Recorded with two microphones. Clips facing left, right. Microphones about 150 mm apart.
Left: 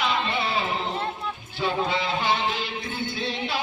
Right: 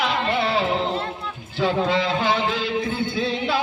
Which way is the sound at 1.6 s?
90° right.